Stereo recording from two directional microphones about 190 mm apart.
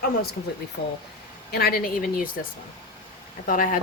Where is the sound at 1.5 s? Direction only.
55° left (ahead or behind).